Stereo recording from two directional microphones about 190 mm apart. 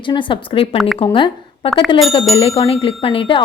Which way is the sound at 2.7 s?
30° left (ahead or behind).